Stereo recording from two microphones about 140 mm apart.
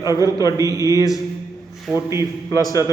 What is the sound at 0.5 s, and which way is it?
Speech, 25° right (ahead or behind).